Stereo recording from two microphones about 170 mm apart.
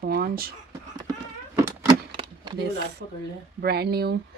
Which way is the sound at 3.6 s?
70° right (ahead or behind).